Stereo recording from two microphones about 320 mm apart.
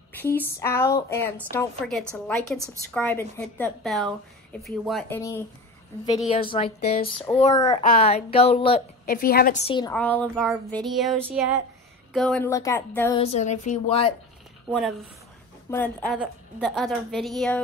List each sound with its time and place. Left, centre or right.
0.2 s a woman's voice: centre
2.9 s a woman's voice: centre
13.2 s a woman's voice: left
15.7 s a woman's voice: centre